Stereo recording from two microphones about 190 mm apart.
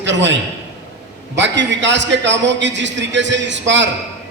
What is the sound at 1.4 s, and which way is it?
A man's voice, 70° right (ahead or behind).